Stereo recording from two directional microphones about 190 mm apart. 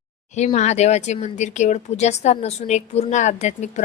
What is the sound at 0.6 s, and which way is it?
A woman's voice, 35° left (ahead or behind).